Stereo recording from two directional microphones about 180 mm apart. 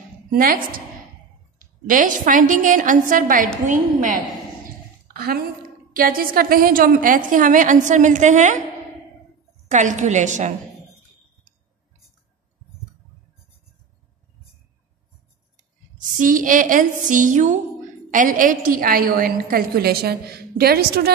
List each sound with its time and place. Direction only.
0.3 s a woman's voice: 50° right (ahead or behind)
5.9 s a woman's voice: 55° right (ahead or behind)
9.7 s a woman's voice: 40° right (ahead or behind)
15.5 s a sound: 45° right (ahead or behind)
17.1 s a woman's voice: 45° right (ahead or behind); by 21.1 s 60° right (ahead or behind)